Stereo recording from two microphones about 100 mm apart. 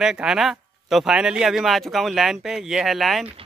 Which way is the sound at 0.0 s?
5° right (ahead or behind).